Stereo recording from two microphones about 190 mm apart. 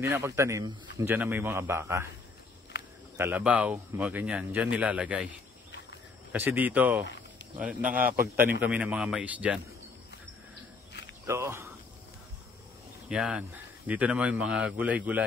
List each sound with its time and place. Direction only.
0.0 s speech: 15° right (ahead or behind)
3.2 s speech: 10° right (ahead or behind)
6.3 s speech: 10° right (ahead or behind)
11.2 s speech: 15° right (ahead or behind)
13.1 s speech: 5° right (ahead or behind)